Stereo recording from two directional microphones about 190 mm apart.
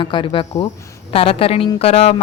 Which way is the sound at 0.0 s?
25° left (ahead or behind).